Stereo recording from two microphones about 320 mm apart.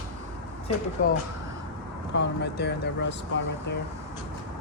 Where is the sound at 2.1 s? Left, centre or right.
Left.